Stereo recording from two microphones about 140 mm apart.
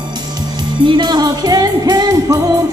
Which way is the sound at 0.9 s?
30° right (ahead or behind).